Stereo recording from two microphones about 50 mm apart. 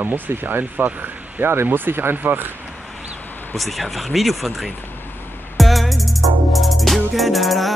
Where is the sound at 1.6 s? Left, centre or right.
Right.